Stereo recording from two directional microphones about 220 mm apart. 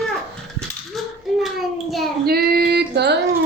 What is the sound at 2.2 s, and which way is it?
Music, 45° right (ahead or behind).